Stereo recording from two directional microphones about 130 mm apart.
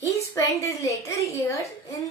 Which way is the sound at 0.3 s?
20° left (ahead or behind).